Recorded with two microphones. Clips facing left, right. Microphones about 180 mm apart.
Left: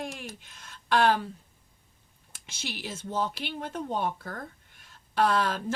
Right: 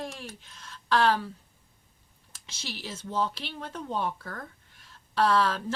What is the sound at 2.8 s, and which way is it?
Speech, 50° left (ahead or behind).